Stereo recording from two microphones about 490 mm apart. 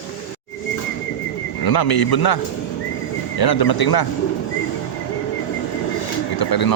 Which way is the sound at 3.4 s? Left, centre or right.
Left.